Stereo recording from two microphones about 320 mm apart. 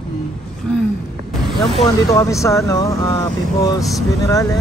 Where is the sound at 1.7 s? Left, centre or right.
Centre.